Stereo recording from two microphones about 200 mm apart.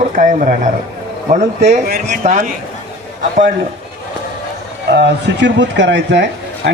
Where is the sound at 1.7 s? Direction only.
45° right (ahead or behind).